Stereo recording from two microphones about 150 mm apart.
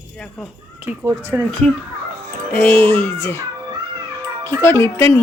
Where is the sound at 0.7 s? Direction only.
10° right (ahead or behind).